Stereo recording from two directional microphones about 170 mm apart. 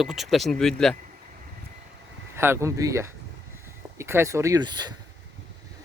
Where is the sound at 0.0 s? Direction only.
Centre (ahead or behind).